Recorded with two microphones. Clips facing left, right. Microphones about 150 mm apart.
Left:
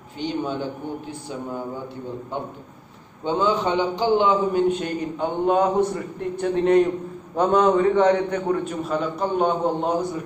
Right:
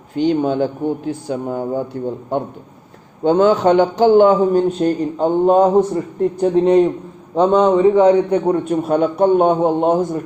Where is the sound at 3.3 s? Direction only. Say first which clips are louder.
Right 9 dB; 75° right (ahead or behind).